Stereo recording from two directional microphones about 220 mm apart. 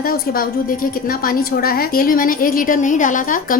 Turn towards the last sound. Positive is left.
turn(degrees=35)  # may be behind; listen again after turning